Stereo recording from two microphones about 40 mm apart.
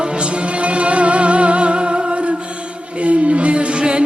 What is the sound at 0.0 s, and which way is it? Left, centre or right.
Music, right.